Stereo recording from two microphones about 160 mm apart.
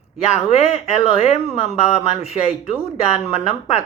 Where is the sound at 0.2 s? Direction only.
40° left (ahead or behind).